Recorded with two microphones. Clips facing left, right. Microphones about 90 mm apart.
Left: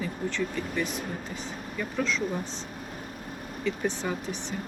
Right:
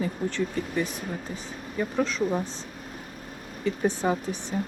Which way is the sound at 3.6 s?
45° right (ahead or behind).